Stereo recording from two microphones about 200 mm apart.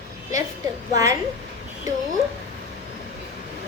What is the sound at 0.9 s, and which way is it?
Speech, 15° right (ahead or behind).